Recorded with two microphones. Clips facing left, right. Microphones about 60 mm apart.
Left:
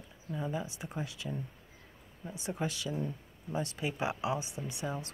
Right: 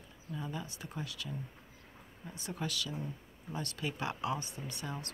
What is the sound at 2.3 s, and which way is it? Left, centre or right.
Speech, centre.